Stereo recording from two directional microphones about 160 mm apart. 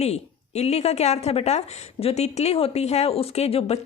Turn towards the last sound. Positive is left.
turn(degrees=40)  # may be behind; listen again after turning